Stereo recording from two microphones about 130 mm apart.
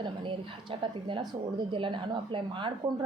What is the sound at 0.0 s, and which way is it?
Speech, 40° right (ahead or behind).